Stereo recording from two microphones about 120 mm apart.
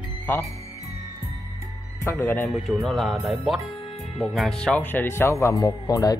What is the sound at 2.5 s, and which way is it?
Speech, centre (ahead or behind).